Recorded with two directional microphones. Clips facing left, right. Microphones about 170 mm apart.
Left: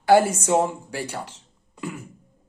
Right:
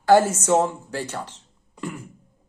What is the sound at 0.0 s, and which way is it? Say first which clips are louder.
Speech: even; 10° left (ahead or behind).